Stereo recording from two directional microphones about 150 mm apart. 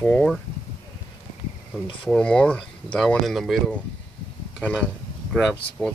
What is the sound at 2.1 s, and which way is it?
Speech, 5° left (ahead or behind).